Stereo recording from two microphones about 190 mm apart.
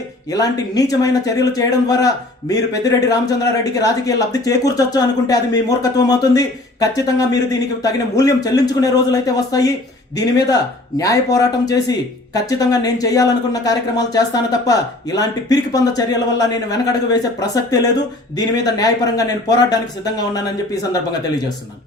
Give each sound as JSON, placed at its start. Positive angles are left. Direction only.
{"t": 0.3, "sound": "a man's voice", "side_deg": 20}